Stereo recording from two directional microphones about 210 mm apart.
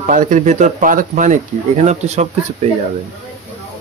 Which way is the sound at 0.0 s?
40° right (ahead or behind).